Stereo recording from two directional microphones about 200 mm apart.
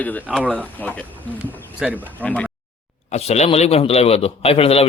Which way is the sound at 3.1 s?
35° left (ahead or behind).